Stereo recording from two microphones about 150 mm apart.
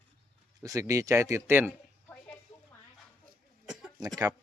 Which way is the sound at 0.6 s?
20° right (ahead or behind).